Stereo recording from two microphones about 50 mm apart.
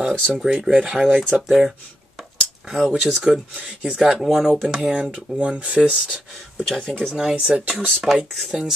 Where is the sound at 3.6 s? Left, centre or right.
Centre.